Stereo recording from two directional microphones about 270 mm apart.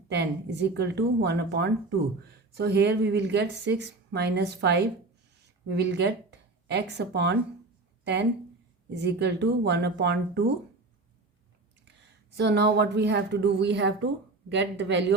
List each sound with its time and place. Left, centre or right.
0.1 s a woman's voice: right
12.4 s a woman's voice: right